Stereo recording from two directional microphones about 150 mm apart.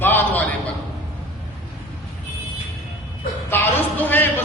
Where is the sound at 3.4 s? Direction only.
15° left (ahead or behind).